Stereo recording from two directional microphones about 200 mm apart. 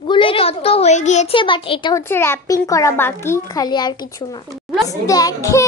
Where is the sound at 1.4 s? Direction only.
25° left (ahead or behind).